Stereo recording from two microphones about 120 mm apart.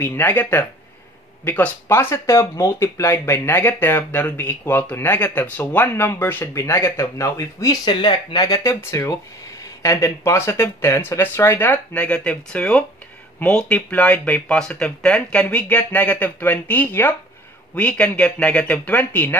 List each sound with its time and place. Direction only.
0.0 s speech: 20° left (ahead or behind)
7.9 s speech: 40° left (ahead or behind); by 19.3 s 15° left (ahead or behind)